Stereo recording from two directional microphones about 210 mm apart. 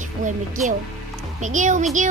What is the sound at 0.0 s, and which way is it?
Speech, 35° right (ahead or behind).